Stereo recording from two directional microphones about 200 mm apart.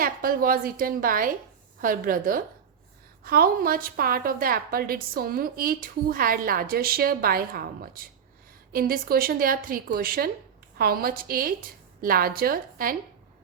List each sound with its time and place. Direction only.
0.0 s a woman's voice: 45° right (ahead or behind)